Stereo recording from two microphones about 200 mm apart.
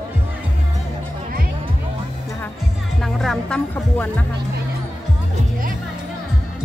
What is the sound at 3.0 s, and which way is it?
Music, centre (ahead or behind).